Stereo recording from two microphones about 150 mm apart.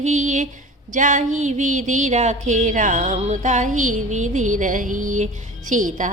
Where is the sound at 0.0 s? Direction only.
55° right (ahead or behind).